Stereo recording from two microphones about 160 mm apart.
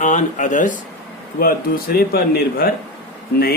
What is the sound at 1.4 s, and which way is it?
A man's voice, 65° left (ahead or behind).